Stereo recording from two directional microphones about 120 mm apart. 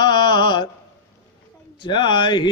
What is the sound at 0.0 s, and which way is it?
Mantra, 40° left (ahead or behind).